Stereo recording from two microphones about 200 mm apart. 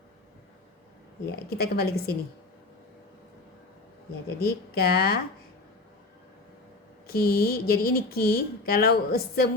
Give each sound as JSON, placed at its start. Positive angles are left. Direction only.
{"t": 1.5, "sound": "speech", "side_deg": 50}
{"t": 4.4, "sound": "speech", "side_deg": 50}
{"t": 7.1, "sound": "speech", "side_deg": 50}